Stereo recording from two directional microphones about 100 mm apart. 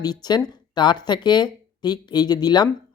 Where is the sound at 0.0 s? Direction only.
45° left (ahead or behind).